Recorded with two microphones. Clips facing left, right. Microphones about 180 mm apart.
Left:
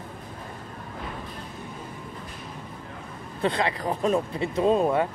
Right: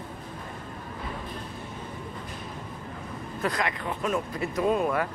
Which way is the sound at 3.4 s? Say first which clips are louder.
Left 4 dB; 30° left (ahead or behind).